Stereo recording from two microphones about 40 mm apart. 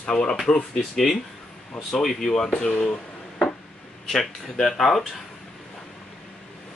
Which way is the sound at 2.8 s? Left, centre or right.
Centre.